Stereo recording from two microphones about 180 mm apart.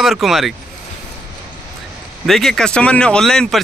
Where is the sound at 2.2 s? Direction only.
Centre (ahead or behind).